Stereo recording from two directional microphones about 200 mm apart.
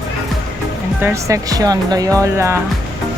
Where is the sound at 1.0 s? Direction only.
10° right (ahead or behind).